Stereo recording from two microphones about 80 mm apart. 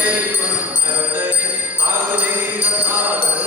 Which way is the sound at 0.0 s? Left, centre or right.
Right.